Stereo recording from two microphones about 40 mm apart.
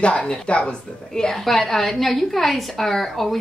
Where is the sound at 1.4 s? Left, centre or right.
Centre.